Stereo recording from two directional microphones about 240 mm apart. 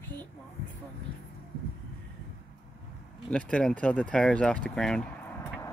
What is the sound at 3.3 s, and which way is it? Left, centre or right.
Speech, centre.